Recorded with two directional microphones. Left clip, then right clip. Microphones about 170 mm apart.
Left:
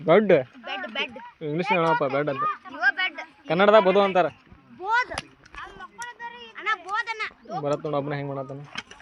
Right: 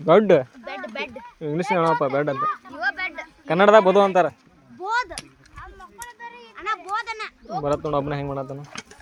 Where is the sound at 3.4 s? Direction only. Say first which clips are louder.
Right 3 dB; 15° right (ahead or behind).